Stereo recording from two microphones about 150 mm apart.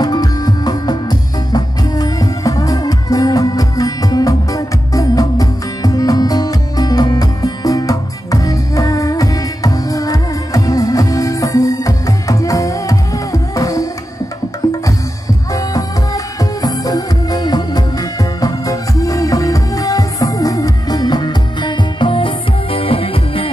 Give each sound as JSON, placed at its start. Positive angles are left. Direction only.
{"t": 0.0, "sound": "music", "side_deg": 25}
{"t": 15.5, "sound": "music", "side_deg": 25}